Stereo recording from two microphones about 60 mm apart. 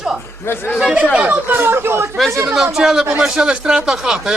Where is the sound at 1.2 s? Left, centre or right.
Right.